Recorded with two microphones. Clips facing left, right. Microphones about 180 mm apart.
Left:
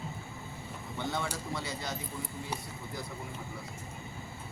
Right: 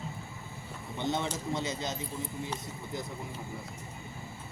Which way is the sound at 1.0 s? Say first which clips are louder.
Right 3 dB; 20° right (ahead or behind).